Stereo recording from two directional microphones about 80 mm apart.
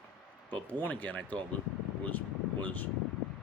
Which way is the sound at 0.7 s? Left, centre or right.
Left.